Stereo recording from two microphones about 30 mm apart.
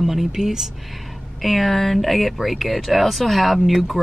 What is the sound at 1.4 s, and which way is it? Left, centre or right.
Speech, centre.